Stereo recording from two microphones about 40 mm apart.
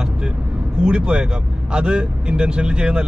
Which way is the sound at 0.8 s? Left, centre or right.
Right.